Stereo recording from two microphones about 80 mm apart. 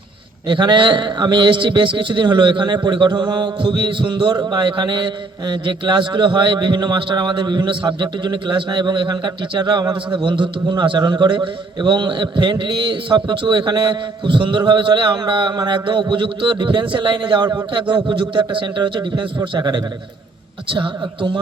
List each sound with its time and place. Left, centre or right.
0.4 s a man's voice: right
20.7 s a woman's voice: right